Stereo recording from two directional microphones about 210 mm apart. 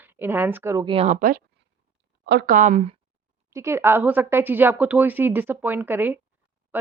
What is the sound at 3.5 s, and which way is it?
Speech, 15° right (ahead or behind).